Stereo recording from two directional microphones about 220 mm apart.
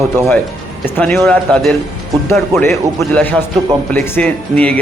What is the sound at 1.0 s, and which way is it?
Speech, 5° left (ahead or behind).